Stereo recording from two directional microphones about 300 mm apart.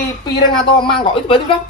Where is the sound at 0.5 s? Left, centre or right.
Centre.